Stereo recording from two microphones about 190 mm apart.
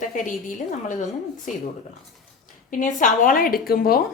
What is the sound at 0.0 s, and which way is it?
Speech, 45° left (ahead or behind).